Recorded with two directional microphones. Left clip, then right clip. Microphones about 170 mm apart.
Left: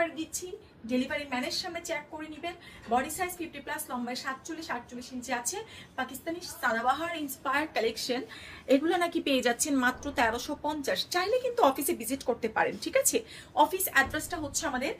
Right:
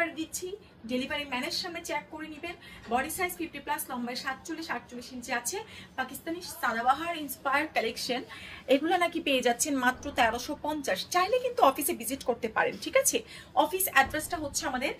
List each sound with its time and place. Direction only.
0.8 s a woman's voice: 15° left (ahead or behind)